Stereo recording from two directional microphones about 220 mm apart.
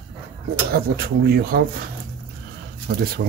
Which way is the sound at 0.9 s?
45° right (ahead or behind).